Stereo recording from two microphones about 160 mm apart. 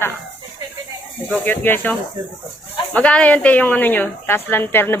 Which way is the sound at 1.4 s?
10° left (ahead or behind).